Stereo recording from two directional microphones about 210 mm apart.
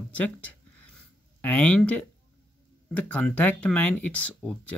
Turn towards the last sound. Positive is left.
turn(degrees=5)  # may be behind; listen again after turning